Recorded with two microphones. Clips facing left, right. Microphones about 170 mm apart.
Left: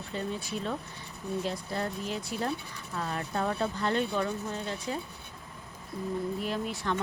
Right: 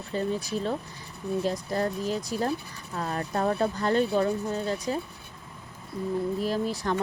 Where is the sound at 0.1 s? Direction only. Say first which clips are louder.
Right 6 dB; 40° right (ahead or behind).